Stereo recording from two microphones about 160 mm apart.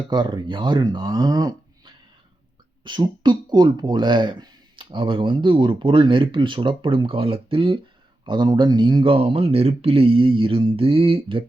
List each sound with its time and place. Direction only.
0.1 s speech: 30° right (ahead or behind)